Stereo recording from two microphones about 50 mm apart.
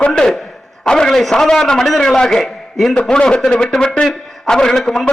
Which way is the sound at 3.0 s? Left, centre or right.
Centre.